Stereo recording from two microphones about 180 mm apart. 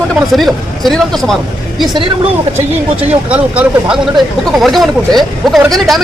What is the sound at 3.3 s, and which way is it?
Speech, 5° right (ahead or behind).